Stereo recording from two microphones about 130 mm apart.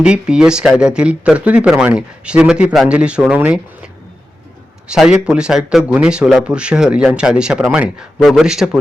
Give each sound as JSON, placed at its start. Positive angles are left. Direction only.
{"t": 0.0, "sound": "speech", "side_deg": -5}
{"t": 4.9, "sound": "speech", "side_deg": -5}